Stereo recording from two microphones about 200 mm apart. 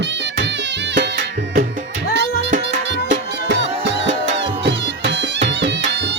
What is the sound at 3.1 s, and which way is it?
Music, 60° right (ahead or behind).